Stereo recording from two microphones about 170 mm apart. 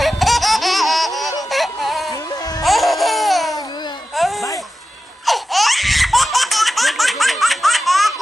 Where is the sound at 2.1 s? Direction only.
20° left (ahead or behind).